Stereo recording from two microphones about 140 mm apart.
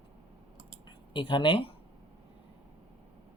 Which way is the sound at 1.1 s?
35° left (ahead or behind).